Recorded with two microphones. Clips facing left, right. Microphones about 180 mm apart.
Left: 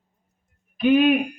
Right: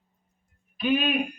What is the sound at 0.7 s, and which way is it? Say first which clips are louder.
Speech: left 8 dB; 50° left (ahead or behind).